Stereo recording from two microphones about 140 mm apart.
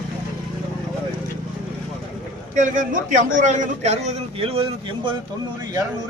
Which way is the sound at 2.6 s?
70° right (ahead or behind).